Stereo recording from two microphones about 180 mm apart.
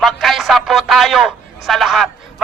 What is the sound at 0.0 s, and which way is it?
A man's voice, centre (ahead or behind).